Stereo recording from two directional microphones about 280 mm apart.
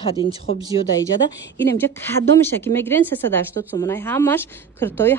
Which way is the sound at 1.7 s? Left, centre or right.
Centre.